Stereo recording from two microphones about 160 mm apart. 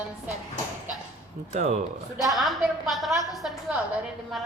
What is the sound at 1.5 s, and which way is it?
Speech, 50° right (ahead or behind).